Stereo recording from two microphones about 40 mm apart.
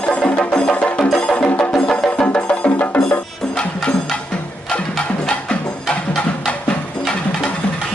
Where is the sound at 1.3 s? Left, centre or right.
Left.